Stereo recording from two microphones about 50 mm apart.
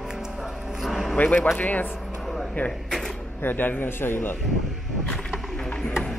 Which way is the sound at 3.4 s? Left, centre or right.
Left.